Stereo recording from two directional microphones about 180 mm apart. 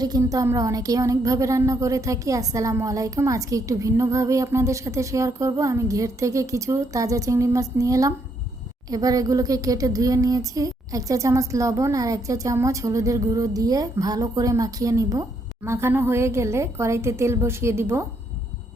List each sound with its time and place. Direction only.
0.0 s speech: 20° right (ahead or behind)